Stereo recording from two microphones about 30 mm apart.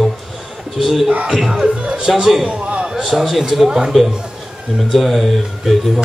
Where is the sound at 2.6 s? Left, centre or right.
Right.